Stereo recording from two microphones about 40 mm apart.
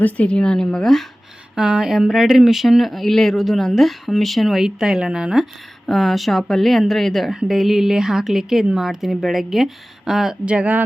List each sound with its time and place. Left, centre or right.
0.0 s speech: left
0.3 s speech: centre
1.5 s speech: centre
2.0 s speech: centre
5.9 s speech: centre
7.4 s speech: centre
10.4 s speech: right